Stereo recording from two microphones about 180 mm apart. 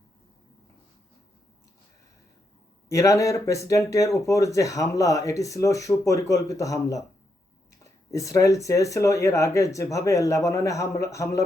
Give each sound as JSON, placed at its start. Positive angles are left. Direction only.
{"t": 2.9, "sound": "speech", "side_deg": 20}
{"t": 8.1, "sound": "speech", "side_deg": 20}